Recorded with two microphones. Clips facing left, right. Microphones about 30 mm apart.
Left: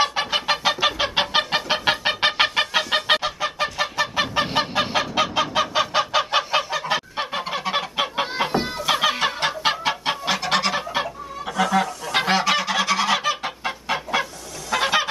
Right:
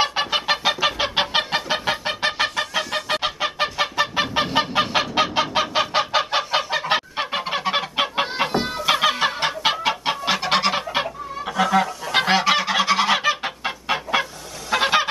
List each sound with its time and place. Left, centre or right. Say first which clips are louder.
0.0 s chicken: even; centre
0.7 s fowl: even; centre
1.7 s chicken: left 2 dB; left
2.5 s fowl: left 3 dB; left
3.2 s goose: right 1 dB; right
3.8 s chicken: right 1 dB; centre
4.6 s fowl: right 3 dB; centre
6.7 s goose: right 2 dB; right
7.3 s goose: right 2 dB; centre
8.7 s fowl: right 3 dB; centre
14.7 s goose: right 2 dB; centre